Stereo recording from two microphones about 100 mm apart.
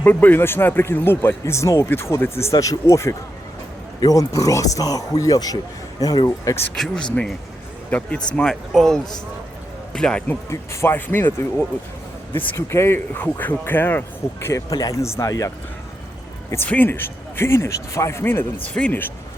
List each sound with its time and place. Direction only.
0.0 s a man's voice: 20° left (ahead or behind); by 6.6 s 35° left (ahead or behind)
6.7 s speech: 5° left (ahead or behind)
10.5 s a man's voice: 30° left (ahead or behind)
14.4 s a man's voice: 35° left (ahead or behind)
16.6 s a man's voice: 20° left (ahead or behind)